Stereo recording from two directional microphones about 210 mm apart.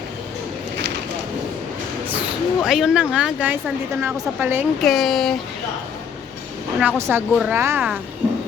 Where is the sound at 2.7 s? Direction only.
Centre (ahead or behind).